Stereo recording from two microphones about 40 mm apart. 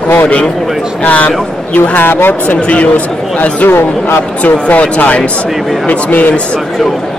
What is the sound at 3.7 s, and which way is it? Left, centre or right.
Speech, left.